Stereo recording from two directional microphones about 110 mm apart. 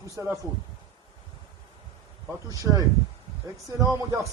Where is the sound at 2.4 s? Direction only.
30° right (ahead or behind).